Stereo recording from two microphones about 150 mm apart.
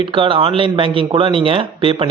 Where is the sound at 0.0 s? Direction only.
35° right (ahead or behind).